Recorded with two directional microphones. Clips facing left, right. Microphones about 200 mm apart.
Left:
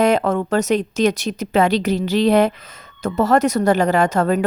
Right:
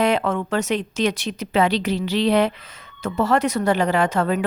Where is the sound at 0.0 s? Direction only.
40° left (ahead or behind).